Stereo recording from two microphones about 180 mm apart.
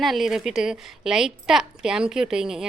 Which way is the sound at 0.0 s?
Centre (ahead or behind).